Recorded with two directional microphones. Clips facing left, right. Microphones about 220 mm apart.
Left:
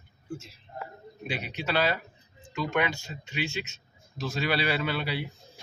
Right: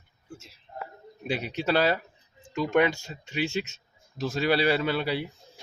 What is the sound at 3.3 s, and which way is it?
A man's voice, 45° right (ahead or behind).